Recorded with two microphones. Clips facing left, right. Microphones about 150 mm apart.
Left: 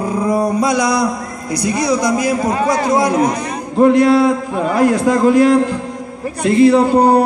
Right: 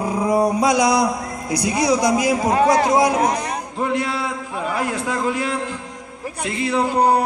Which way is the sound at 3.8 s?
45° left (ahead or behind).